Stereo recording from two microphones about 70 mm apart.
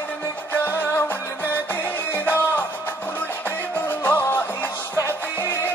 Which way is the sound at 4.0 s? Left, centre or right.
Left.